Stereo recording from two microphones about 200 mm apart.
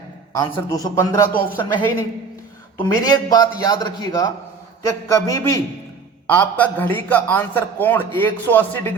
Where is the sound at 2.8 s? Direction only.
20° left (ahead or behind).